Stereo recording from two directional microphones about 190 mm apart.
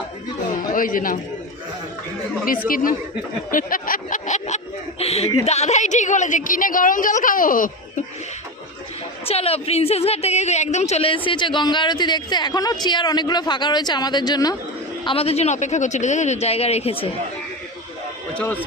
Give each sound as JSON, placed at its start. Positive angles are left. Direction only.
{"t": 0.7, "sound": "speech", "side_deg": 45}
{"t": 2.6, "sound": "a woman's voice", "side_deg": 50}
{"t": 9.2, "sound": "a woman's voice", "side_deg": 30}
{"t": 15.0, "sound": "a woman's voice", "side_deg": 30}
{"t": 18.3, "sound": "speech", "side_deg": 10}